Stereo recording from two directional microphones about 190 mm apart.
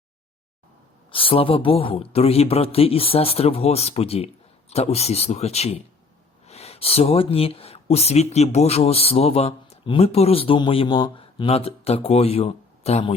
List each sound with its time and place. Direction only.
1.1 s speech: 30° left (ahead or behind)